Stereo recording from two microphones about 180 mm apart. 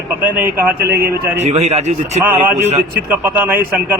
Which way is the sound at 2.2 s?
10° right (ahead or behind).